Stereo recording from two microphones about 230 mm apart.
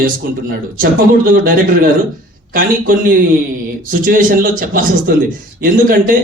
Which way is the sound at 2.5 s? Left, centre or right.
Right.